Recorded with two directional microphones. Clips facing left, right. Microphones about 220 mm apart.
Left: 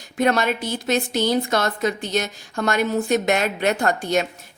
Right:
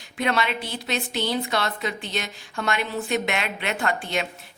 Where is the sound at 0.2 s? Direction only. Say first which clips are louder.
Left 5 dB; 45° left (ahead or behind).